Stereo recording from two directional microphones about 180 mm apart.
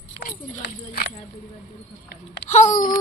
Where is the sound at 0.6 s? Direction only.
55° left (ahead or behind).